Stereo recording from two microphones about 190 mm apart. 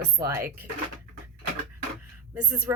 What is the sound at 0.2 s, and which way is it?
Speech, 15° right (ahead or behind).